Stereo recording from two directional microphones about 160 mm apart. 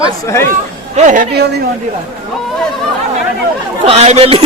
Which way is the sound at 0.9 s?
50° right (ahead or behind).